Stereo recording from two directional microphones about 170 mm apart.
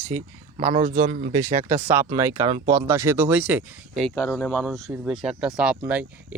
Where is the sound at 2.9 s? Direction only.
10° right (ahead or behind).